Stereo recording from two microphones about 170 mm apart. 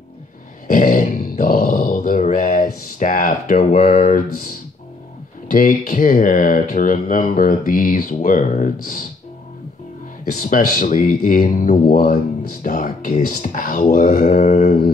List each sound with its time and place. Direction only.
0.7 s a sound: 50° left (ahead or behind)
5.5 s speech: 50° left (ahead or behind)
10.4 s speech: 55° left (ahead or behind)